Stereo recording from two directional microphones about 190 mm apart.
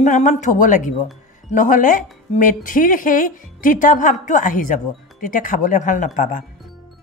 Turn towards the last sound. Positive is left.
turn(degrees=45)  # may be behind; listen again after turning